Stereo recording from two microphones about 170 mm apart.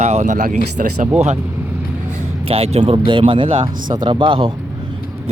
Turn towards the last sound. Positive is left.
turn(degrees=-30)  # may be behind; listen again after turning